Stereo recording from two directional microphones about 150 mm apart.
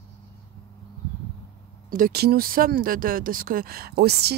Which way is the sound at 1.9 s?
80° right.